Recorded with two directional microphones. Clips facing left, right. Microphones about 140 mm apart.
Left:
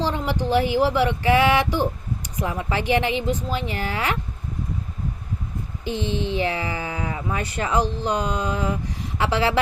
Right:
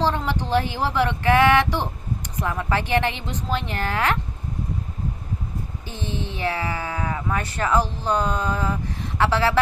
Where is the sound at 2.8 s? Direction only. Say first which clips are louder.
Left 2 dB; 15° left (ahead or behind).